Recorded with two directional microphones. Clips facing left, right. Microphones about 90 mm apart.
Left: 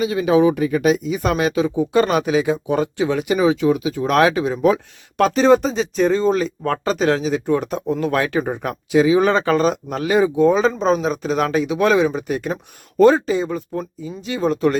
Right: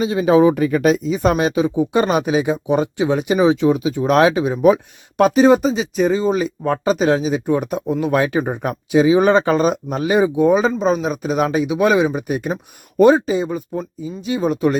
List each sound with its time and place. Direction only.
0.0 s speech: 30° right (ahead or behind); by 0.9 s 45° right (ahead or behind)
1.0 s speech: 30° right (ahead or behind); by 14.8 s 15° right (ahead or behind)